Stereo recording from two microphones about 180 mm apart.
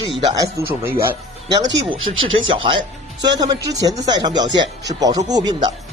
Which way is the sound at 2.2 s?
90° right.